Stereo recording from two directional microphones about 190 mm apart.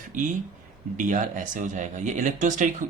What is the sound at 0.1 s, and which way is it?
Speech, 45° right (ahead or behind).